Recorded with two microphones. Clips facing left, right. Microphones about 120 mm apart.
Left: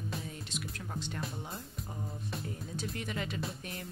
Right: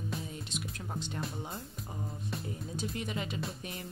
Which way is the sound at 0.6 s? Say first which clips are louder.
Right 1 dB; 20° right (ahead or behind).